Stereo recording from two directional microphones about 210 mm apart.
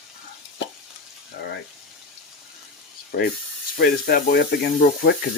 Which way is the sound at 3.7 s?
45° left (ahead or behind).